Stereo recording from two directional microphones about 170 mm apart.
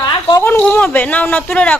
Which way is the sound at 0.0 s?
25° left (ahead or behind).